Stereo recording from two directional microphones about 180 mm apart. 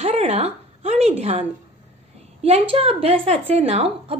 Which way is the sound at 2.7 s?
30° right (ahead or behind).